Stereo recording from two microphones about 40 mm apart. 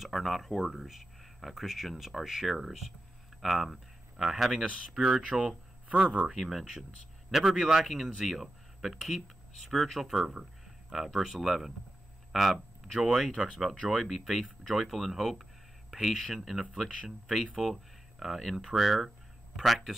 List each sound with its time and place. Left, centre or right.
0.0 s speech: centre
5.4 s a sound: right
6.3 s speech: centre